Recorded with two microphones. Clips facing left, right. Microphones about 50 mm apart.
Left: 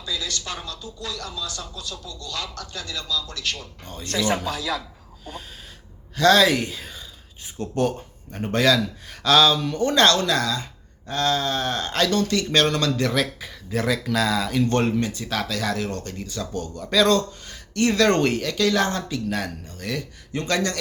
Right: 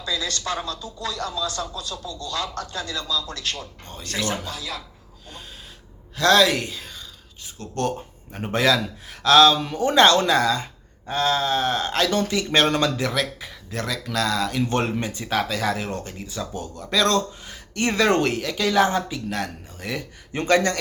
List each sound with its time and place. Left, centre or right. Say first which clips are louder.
0.0 s speech: right 3 dB; right
6.1 s speech: left 1 dB; centre
7.6 s speech: left 7 dB; left
8.3 s speech: left 1 dB; centre
12.6 s a man's voice: right 2 dB; right
13.0 s speech: left 2 dB; centre
14.7 s speech: left 2 dB; centre
14.9 s a man's voice: left 3 dB; right
15.2 s speech: right 2 dB; centre
17.7 s a man's voice: left 2 dB; right
18.1 s speech: even; centre
20.3 s a man's voice: right 4 dB; right